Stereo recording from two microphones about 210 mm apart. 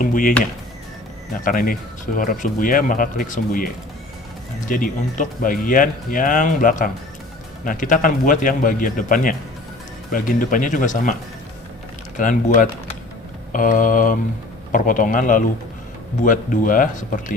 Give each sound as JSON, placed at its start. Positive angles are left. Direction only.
{"t": 0.0, "sound": "speech", "side_deg": 40}
{"t": 4.7, "sound": "speech", "side_deg": 40}
{"t": 12.1, "sound": "speech", "side_deg": 40}